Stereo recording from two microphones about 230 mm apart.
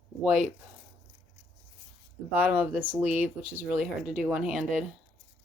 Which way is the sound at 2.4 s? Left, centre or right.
Centre.